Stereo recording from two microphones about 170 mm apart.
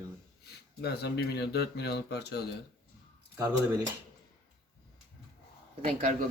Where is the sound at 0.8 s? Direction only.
80° left.